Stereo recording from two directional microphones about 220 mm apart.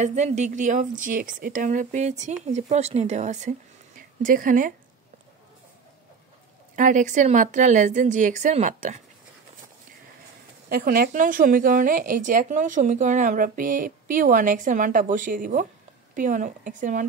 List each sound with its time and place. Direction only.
0.0 s a woman's voice: 30° right (ahead or behind)
6.7 s a woman's voice: 35° right (ahead or behind)
10.7 s a woman's voice: 45° right (ahead or behind)